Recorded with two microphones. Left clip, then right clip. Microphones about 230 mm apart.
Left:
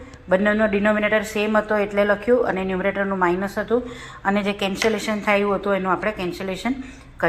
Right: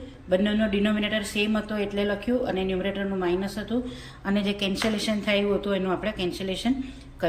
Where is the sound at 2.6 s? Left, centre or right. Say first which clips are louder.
Left 5 dB; left.